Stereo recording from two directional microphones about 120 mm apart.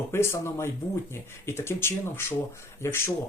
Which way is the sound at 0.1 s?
20° left (ahead or behind).